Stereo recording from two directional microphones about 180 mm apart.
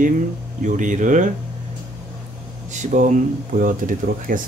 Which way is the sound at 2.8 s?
45° right (ahead or behind).